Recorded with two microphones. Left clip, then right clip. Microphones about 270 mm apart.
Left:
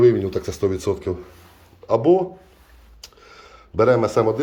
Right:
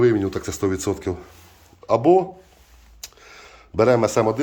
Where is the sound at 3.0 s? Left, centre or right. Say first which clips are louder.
Right 2 dB; centre.